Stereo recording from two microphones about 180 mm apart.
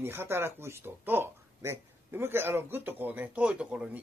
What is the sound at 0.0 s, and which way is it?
Speech, 15° right (ahead or behind).